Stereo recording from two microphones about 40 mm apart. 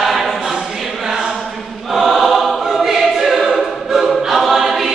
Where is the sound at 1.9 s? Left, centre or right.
Centre.